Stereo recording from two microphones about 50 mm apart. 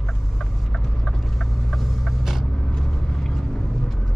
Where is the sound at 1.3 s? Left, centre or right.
Centre.